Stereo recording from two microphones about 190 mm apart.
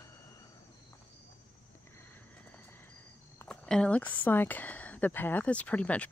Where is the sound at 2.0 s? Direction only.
10° left (ahead or behind).